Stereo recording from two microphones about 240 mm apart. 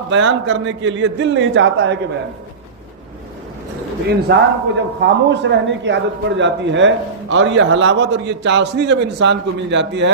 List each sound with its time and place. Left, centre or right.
0.1 s a man's voice: right
4.3 s a man's voice: right